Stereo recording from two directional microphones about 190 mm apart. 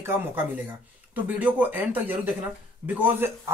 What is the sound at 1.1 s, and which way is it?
Speech, 10° right (ahead or behind).